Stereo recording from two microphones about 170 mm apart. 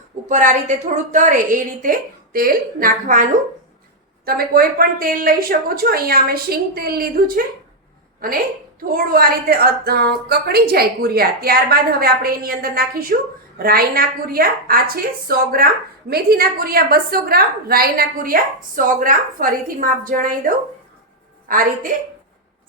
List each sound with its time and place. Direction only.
0.3 s a woman's voice: 45° right (ahead or behind)
4.3 s a woman's voice: 60° right (ahead or behind)
9.0 s a woman's voice: 60° right (ahead or behind)